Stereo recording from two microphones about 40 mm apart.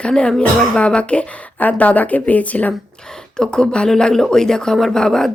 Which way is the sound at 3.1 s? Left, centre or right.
Centre.